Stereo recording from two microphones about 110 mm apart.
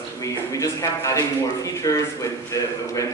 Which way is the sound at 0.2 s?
30° left (ahead or behind).